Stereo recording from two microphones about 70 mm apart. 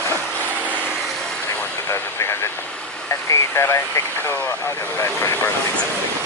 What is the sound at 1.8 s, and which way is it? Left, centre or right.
Speech, left.